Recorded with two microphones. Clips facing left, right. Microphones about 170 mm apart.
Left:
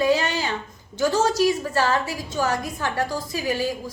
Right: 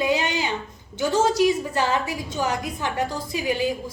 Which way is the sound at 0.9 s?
20° right (ahead or behind).